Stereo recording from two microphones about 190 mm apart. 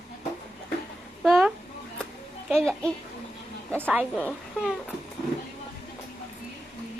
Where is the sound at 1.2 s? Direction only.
Centre (ahead or behind).